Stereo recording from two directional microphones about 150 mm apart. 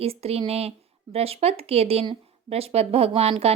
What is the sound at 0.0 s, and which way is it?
Speech, 40° right (ahead or behind).